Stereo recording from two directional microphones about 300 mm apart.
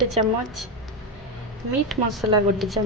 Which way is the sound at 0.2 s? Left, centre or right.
Right.